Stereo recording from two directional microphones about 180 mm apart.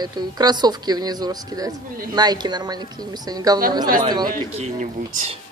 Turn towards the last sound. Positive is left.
turn(degrees=-40)  # may be behind; listen again after turning